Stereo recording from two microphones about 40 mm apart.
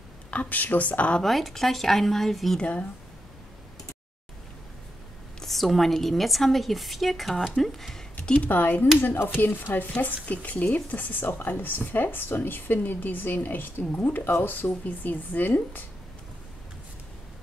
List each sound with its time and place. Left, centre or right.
0.3 s speech: left
1.2 s a woman's voice: centre
5.4 s a woman's voice: centre
8.5 s a woman's voice: left
14.3 s a woman's voice: left